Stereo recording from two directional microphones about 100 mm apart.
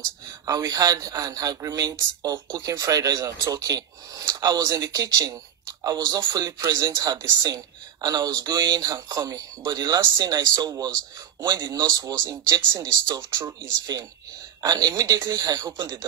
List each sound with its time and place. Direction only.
0.5 s a woman's voice: 35° right (ahead or behind)